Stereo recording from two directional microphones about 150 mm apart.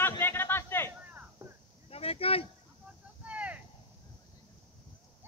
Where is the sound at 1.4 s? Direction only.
20° right (ahead or behind).